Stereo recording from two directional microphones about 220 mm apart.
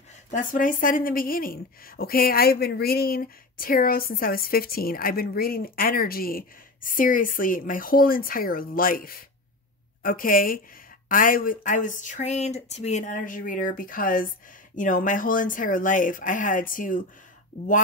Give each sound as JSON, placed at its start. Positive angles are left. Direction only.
{"t": 0.3, "sound": "speech", "side_deg": 35}